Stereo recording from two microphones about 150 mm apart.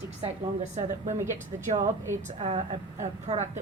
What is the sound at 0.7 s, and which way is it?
Speech, 50° right (ahead or behind).